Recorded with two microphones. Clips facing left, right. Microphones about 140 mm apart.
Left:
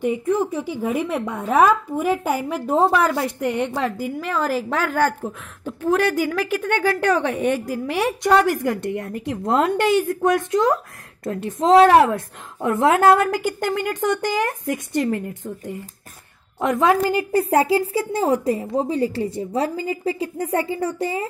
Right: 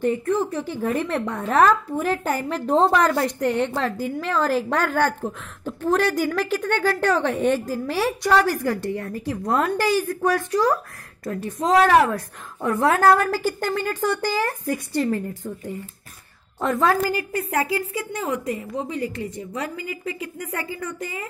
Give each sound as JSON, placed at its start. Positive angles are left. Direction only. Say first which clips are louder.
{"t": 0.0, "sound": "a woman's voice", "louder": "left 1 dB", "side_deg": 15}